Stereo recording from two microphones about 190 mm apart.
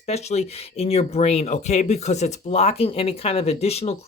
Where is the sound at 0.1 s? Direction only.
35° left (ahead or behind).